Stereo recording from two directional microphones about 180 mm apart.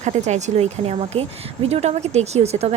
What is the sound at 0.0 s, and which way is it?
A woman's voice, 40° right (ahead or behind).